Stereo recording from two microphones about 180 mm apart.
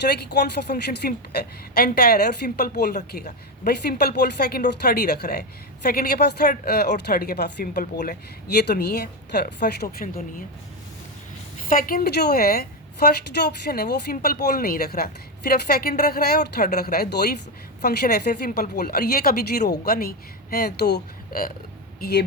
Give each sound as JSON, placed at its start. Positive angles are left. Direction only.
{"t": 0.3, "sound": "a woman's voice", "side_deg": 65}
{"t": 7.7, "sound": "speech", "side_deg": 45}
{"t": 8.5, "sound": "a woman's voice", "side_deg": 65}
{"t": 9.8, "sound": "speech", "side_deg": 50}
{"t": 11.7, "sound": "a woman's voice", "side_deg": 50}